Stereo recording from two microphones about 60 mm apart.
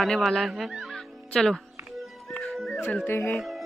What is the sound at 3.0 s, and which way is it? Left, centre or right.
Speech, left.